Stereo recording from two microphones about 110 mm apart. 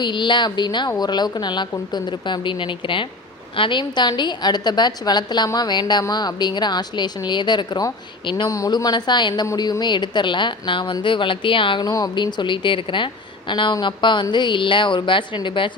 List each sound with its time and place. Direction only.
0.0 s a woman's voice: 45° left (ahead or behind)
8.4 s a woman's voice: 30° left (ahead or behind); by 11.8 s 50° left (ahead or behind)
11.8 s a woman's voice: 35° left (ahead or behind); by 15.7 s 50° left (ahead or behind)